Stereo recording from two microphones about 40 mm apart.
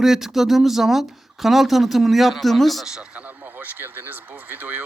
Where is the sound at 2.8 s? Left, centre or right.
Centre.